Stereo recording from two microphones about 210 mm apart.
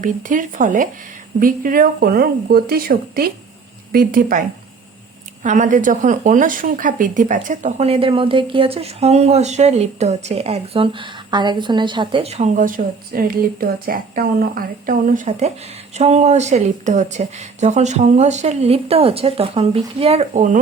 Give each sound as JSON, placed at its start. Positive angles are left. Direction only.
{"t": 0.0, "sound": "speech", "side_deg": -40}